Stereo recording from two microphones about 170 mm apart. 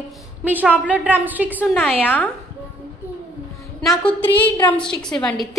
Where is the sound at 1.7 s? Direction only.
Centre (ahead or behind).